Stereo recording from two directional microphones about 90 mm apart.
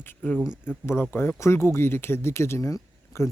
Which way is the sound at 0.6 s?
25° left (ahead or behind).